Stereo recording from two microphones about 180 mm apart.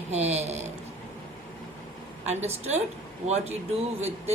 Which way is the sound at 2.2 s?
35° right (ahead or behind).